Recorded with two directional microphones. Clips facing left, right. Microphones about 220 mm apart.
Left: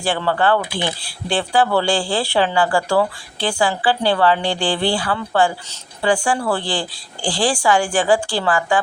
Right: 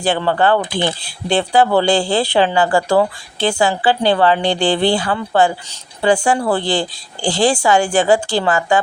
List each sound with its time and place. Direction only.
0.0 s speech: 20° right (ahead or behind)